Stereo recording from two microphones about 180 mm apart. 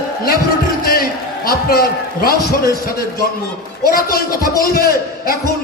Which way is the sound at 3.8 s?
55° left (ahead or behind).